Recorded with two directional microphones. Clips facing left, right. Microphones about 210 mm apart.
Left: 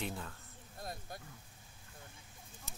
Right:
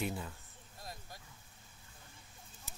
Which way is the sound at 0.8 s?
55° left (ahead or behind).